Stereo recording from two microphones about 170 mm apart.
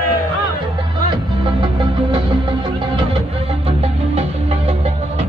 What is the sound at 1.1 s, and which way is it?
Music, 30° right (ahead or behind).